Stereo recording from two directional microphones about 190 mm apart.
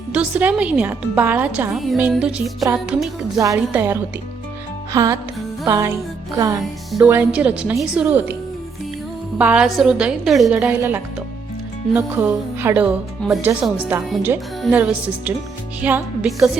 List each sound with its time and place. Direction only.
0.1 s a woman's voice: 5° right (ahead or behind)
4.9 s music: 20° right (ahead or behind)
5.6 s a woman's voice: 15° right (ahead or behind)
9.4 s a woman's voice: 5° right (ahead or behind)